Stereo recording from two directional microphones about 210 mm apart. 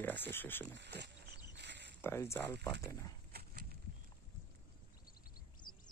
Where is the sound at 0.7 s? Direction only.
55° right (ahead or behind).